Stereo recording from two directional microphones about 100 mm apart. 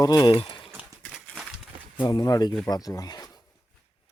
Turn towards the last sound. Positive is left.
turn(degrees=40)  # may be behind; listen again after turning